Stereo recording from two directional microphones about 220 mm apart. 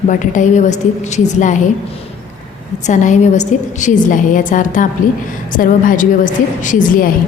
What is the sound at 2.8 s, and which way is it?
A woman's voice, 35° left (ahead or behind).